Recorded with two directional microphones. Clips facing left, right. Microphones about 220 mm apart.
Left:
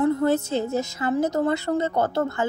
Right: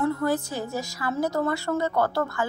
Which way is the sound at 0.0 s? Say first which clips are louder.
Left 4 dB; 25° left (ahead or behind).